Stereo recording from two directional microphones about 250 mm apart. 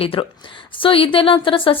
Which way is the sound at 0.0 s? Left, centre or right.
Left.